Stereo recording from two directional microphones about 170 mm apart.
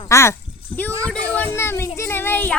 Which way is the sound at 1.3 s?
10° left (ahead or behind).